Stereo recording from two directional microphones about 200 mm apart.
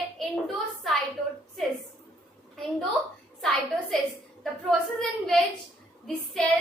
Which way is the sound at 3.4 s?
Centre (ahead or behind).